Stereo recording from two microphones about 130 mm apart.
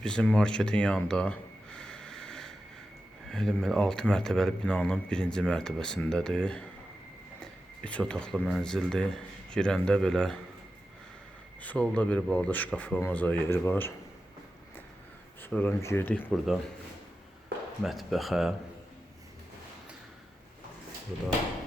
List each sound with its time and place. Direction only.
0.0 s a sound: 5° left (ahead or behind)
3.2 s speech: 5° left (ahead or behind)
7.9 s speech: 10° left (ahead or behind)
11.6 s speech: 10° left (ahead or behind)
15.4 s speech: 15° left (ahead or behind)
17.8 s speech: centre (ahead or behind)